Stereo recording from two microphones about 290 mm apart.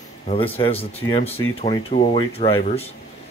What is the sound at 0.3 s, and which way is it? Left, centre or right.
Speech, centre.